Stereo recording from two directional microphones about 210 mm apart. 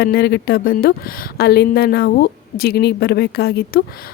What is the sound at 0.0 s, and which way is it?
Speech, 50° left (ahead or behind).